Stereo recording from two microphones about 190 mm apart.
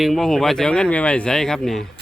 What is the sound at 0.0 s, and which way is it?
A man's voice, centre (ahead or behind).